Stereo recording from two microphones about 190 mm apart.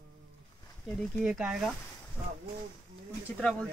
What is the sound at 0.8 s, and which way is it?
Speech, centre (ahead or behind).